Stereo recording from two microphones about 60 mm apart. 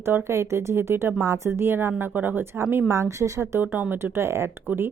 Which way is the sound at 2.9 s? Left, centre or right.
Right.